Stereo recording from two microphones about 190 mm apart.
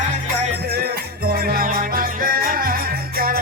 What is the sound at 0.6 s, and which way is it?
Music, 55° right (ahead or behind).